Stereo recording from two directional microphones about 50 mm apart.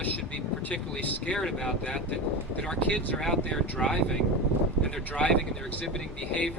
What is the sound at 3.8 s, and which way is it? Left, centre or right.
Speech, left.